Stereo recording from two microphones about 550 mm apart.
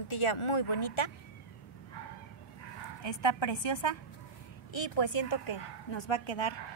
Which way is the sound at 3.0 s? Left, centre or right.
Left.